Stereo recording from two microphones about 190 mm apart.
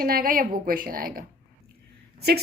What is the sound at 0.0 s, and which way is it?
A woman's voice, 50° right (ahead or behind).